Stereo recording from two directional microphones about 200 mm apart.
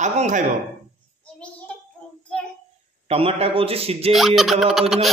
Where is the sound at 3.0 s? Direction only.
30° right (ahead or behind).